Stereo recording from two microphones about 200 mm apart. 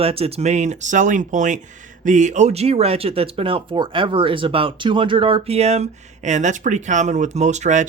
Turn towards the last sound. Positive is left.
turn(degrees=-35)  # may be behind; listen again after turning